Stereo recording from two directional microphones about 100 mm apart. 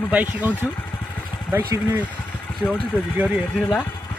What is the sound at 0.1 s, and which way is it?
Speech, 15° right (ahead or behind).